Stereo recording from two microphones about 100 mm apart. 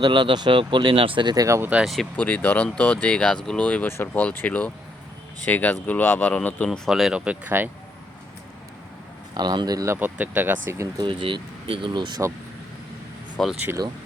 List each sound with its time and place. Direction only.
0.0 s speech: 50° right (ahead or behind)
1.5 s speech: 30° right (ahead or behind)
1.7 s speech: centre (ahead or behind)
2.1 s speech: 15° left (ahead or behind)
6.7 s speech: centre (ahead or behind); by 7.7 s 20° right (ahead or behind)
9.3 s speech: 45° right (ahead or behind)
10.0 s speech: 15° right (ahead or behind)
10.9 s speech: 55° right (ahead or behind)
13.4 s speech: 5° left (ahead or behind)